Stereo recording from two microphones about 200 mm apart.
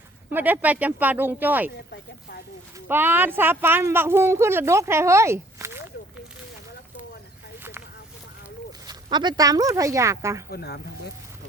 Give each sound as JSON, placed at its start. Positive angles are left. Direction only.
{"t": 0.3, "sound": "speech", "side_deg": -10}
{"t": 2.9, "sound": "speech", "side_deg": -10}
{"t": 8.9, "sound": "speech", "side_deg": -20}
{"t": 10.5, "sound": "speech", "side_deg": 55}